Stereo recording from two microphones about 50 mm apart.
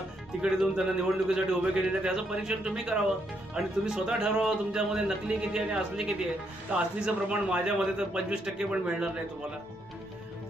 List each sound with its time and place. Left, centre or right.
0.4 s speech: centre
6.7 s a man's voice: right